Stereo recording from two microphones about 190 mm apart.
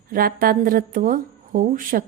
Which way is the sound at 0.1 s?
50° right (ahead or behind).